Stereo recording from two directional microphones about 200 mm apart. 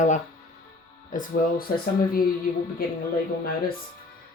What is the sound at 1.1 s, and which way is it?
Speech, 45° left (ahead or behind).